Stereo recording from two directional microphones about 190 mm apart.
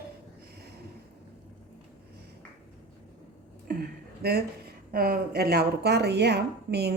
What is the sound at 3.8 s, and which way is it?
A woman's voice, 55° right (ahead or behind).